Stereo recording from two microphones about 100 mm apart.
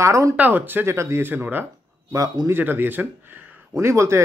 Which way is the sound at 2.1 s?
35° right (ahead or behind).